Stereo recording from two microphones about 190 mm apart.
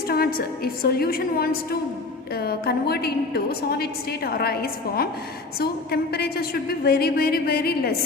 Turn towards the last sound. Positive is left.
turn(degrees=55)  # may be behind; listen again after turning